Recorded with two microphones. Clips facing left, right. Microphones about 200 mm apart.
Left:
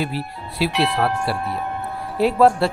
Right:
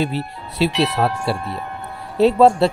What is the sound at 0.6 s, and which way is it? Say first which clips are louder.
Speech: right 2 dB; 25° right (ahead or behind).